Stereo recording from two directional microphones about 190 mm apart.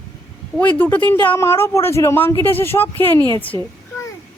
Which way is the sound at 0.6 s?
10° left (ahead or behind).